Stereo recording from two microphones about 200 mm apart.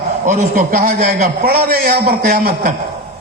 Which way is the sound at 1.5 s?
50° right (ahead or behind).